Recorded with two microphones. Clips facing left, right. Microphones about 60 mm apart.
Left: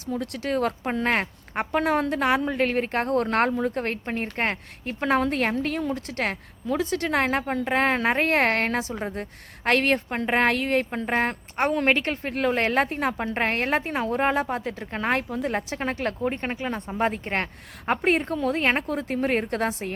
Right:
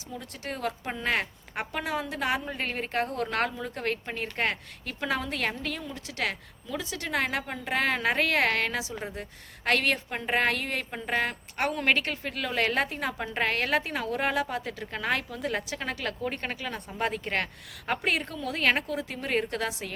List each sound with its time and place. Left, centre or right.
0.1 s a woman's voice: left